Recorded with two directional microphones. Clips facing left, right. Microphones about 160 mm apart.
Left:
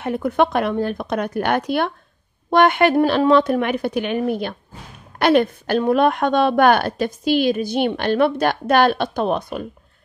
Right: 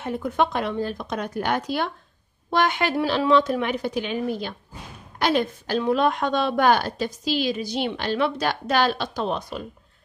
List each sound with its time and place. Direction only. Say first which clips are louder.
0.0 s a woman's voice: left 5 dB; 65° left (ahead or behind)